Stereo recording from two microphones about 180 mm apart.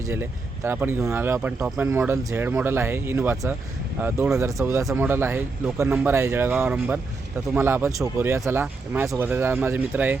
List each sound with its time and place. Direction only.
0.0 s speech: 15° right (ahead or behind)